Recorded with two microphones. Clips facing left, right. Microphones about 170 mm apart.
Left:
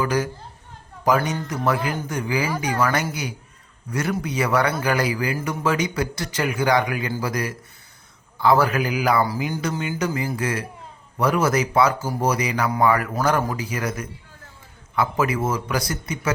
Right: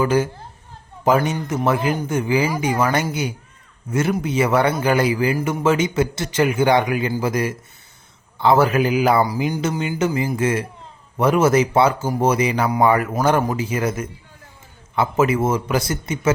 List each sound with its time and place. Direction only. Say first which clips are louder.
0.0 s a man's voice: right 4 dB; 25° right (ahead or behind)
9.2 s a man's voice: right 3 dB; 15° right (ahead or behind)